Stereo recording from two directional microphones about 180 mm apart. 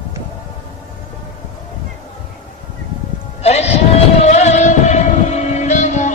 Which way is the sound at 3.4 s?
35° left (ahead or behind).